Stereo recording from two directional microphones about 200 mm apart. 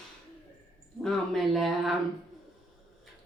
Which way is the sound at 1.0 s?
Centre (ahead or behind).